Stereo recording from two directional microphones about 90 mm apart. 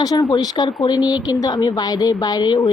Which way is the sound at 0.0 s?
45° left (ahead or behind).